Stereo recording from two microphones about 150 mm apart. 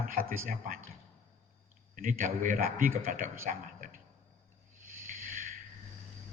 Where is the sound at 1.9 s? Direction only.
60° right (ahead or behind).